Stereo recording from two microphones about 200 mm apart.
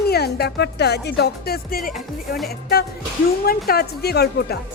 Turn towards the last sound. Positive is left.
turn(degrees=55)  # may be behind; listen again after turning